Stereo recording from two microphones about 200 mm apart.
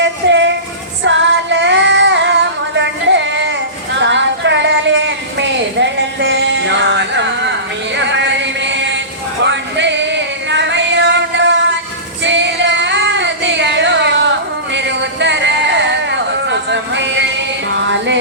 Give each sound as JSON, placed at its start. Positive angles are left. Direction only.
{"t": 0.0, "sound": "train", "side_deg": -65}
{"t": 1.0, "sound": "child singing", "side_deg": -65}
{"t": 4.0, "sound": "a sound", "side_deg": -65}
{"t": 9.4, "sound": "music", "side_deg": -60}
{"t": 12.2, "sound": "female singing", "side_deg": -60}
{"t": 14.7, "sound": "a sound", "side_deg": -60}